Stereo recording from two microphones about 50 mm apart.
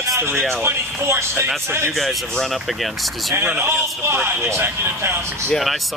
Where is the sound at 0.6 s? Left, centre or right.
Right.